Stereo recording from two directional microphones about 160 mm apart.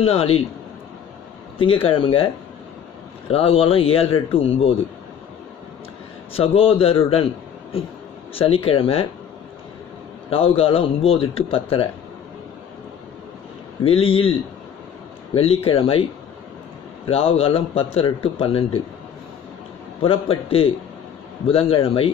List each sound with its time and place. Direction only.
0.0 s speech: 40° left (ahead or behind)
1.6 s speech: 35° left (ahead or behind)
6.3 s speech: 35° left (ahead or behind)
8.4 s speech: 35° left (ahead or behind)
10.3 s speech: 35° left (ahead or behind)
13.8 s speech: 35° left (ahead or behind)
15.3 s speech: 35° left (ahead or behind)
20.0 s speech: 35° left (ahead or behind)